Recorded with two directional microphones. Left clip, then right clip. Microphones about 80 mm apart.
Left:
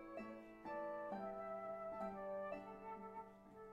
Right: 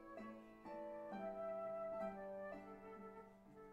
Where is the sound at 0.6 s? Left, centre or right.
Left.